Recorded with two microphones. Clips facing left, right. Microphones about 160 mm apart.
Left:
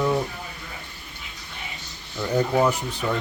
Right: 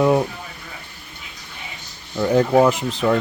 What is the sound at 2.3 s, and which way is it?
Speech, 90° right.